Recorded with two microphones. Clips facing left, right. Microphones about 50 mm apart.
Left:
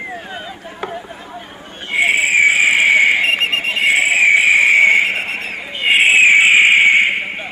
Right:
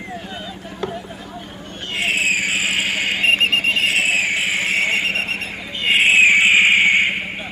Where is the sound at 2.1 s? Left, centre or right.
Left.